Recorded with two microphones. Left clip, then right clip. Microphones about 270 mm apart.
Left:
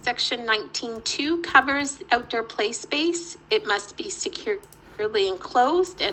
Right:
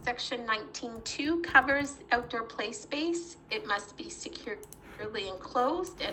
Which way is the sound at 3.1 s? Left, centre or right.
Right.